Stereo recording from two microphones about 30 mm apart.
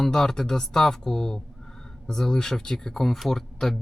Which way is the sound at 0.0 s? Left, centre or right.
Centre.